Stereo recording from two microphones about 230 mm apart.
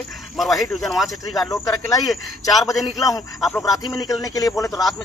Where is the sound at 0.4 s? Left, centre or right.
Centre.